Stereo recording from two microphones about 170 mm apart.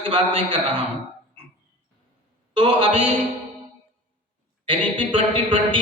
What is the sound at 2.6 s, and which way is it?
Speech, 30° right (ahead or behind).